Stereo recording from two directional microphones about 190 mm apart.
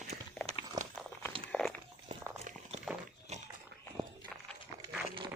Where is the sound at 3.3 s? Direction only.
35° right (ahead or behind).